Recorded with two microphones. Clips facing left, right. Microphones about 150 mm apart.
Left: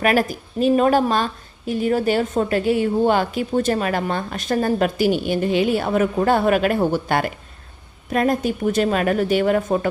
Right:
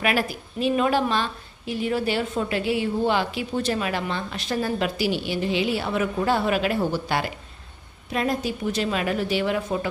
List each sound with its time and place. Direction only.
0.0 s a woman's voice: 45° left (ahead or behind)